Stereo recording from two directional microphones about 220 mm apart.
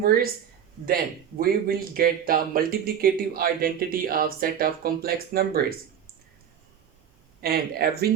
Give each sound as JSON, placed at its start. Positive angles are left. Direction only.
{"t": 0.0, "sound": "a man's voice", "side_deg": -45}
{"t": 7.4, "sound": "a man's voice", "side_deg": -45}